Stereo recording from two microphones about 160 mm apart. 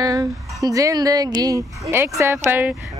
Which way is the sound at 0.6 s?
20° right (ahead or behind).